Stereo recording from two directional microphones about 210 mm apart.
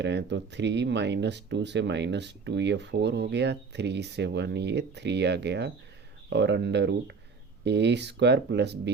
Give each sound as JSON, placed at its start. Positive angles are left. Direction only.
{"t": 0.0, "sound": "speech", "side_deg": -55}